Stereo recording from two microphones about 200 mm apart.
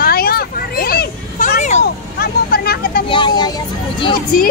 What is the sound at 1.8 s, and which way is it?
Vehicle, 50° left (ahead or behind).